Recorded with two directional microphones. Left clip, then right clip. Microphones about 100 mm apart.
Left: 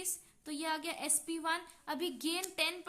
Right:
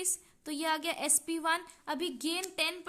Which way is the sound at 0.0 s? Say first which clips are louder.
Right 6 dB; 50° right (ahead or behind).